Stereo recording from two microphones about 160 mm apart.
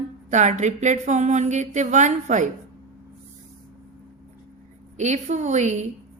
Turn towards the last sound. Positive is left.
turn(degrees=-45)  # may be behind; listen again after turning